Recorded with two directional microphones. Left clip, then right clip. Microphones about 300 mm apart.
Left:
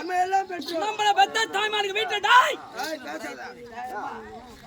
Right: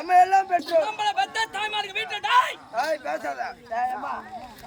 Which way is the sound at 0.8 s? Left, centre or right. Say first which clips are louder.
Left 3 dB; centre.